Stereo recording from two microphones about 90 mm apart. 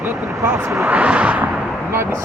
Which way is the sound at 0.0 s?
30° right (ahead or behind).